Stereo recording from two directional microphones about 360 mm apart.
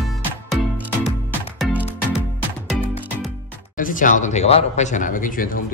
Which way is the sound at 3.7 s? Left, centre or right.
Left.